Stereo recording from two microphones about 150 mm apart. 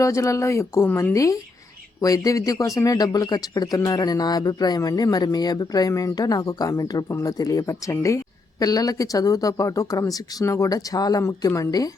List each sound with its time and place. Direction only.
0.0 s speech: 20° left (ahead or behind)